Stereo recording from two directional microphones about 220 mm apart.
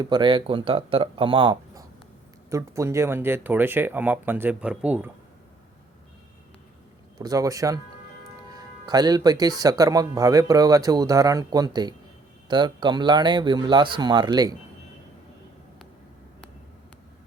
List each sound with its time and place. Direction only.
0.0 s speech: 20° right (ahead or behind)
7.2 s speech: 15° right (ahead or behind)